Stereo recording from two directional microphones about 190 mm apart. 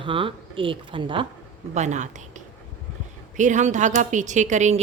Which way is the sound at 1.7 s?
40° right (ahead or behind).